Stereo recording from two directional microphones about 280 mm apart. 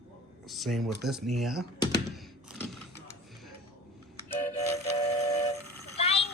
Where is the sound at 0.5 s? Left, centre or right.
Centre.